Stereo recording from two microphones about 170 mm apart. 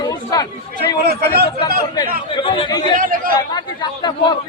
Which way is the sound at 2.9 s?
55° right (ahead or behind).